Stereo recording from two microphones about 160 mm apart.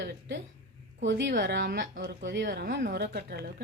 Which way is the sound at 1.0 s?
90° right.